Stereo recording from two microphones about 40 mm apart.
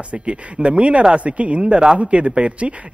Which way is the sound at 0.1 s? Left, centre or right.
Right.